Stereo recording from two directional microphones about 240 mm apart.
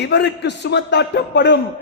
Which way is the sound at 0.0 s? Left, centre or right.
Left.